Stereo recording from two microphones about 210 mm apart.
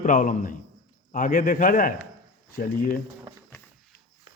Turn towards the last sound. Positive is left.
turn(degrees=45)  # may be behind; listen again after turning